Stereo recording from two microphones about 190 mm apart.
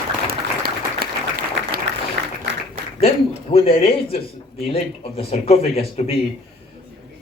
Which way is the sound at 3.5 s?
35° left (ahead or behind).